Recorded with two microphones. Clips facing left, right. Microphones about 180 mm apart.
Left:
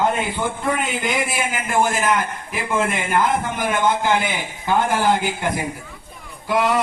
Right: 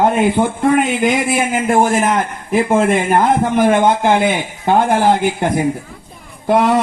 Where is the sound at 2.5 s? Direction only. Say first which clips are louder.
Right 10 dB; 50° right (ahead or behind).